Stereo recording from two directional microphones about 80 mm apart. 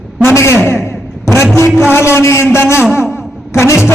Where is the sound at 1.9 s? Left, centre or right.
Left.